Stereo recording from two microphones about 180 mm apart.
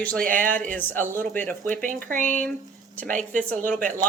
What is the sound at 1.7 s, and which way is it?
Speech, 45° right (ahead or behind).